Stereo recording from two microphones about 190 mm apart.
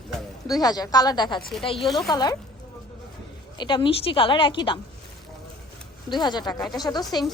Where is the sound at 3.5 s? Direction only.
25° left (ahead or behind).